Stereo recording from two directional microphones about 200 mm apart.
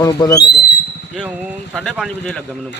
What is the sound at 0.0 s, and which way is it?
Speech, 20° left (ahead or behind).